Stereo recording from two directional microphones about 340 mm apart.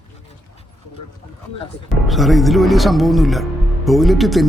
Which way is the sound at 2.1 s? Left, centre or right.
Centre.